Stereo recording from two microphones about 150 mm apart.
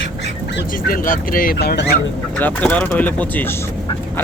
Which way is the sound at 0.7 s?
70° left (ahead or behind).